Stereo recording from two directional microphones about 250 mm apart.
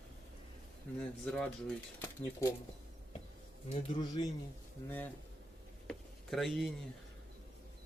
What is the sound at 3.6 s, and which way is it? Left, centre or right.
Speech, left.